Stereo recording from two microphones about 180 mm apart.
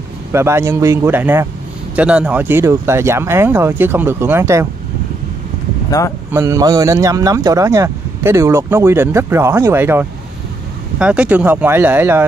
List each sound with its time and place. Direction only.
0.3 s a man's voice: 15° right (ahead or behind)
5.9 s speech: 20° left (ahead or behind)
6.3 s a man's voice: 15° right (ahead or behind)